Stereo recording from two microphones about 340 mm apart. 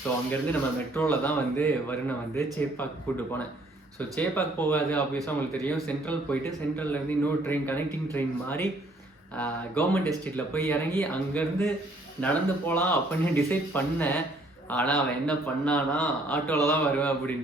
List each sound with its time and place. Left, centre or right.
0.3 s speech: centre